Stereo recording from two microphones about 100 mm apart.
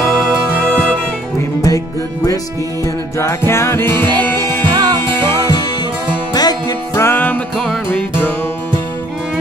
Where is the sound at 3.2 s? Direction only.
25° left (ahead or behind).